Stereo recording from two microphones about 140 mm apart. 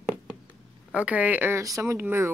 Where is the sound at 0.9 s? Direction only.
10° right (ahead or behind).